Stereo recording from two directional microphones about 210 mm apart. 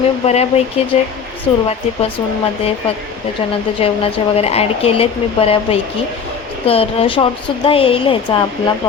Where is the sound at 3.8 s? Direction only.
25° left (ahead or behind).